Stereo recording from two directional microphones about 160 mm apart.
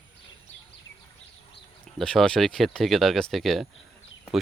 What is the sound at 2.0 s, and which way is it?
Speech, 5° left (ahead or behind).